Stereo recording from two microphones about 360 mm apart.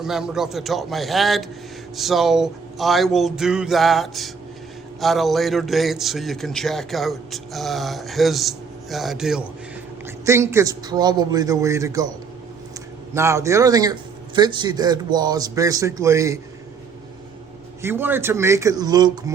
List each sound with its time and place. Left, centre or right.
0.0 s a man's voice: centre
13.1 s a man's voice: centre
17.8 s a man's voice: centre